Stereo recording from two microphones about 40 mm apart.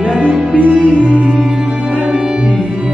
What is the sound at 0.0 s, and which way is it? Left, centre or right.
Music, right.